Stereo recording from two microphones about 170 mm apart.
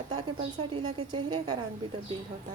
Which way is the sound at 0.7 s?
25° right (ahead or behind).